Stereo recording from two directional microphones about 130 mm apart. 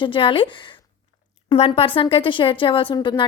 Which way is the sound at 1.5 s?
45° left (ahead or behind).